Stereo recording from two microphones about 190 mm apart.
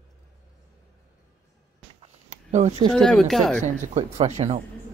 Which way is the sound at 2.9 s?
Centre (ahead or behind).